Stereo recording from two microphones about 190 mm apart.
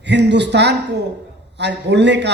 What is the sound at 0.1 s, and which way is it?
A man's voice, 65° right (ahead or behind).